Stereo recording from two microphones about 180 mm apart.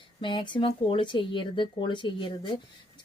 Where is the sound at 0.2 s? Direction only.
25° left (ahead or behind).